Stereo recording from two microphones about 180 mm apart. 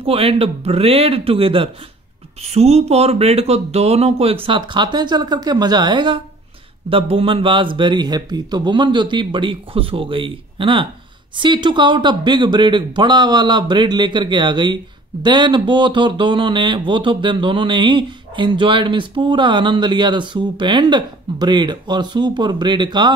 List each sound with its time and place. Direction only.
0.0 s speech: 30° right (ahead or behind)